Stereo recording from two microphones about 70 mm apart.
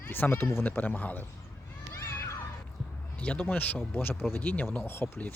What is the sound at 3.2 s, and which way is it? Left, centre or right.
Speech, left.